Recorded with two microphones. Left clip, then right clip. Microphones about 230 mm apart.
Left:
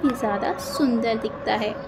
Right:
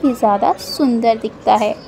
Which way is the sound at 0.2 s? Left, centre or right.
Right.